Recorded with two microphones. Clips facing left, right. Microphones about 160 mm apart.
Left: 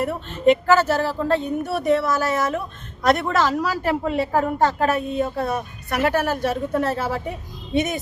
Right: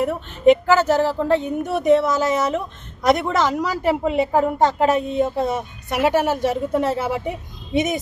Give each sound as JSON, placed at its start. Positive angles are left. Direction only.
{"t": 0.0, "sound": "speech", "side_deg": -15}